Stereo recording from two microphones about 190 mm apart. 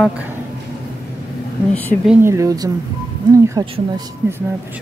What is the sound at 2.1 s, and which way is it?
Speech, 15° right (ahead or behind).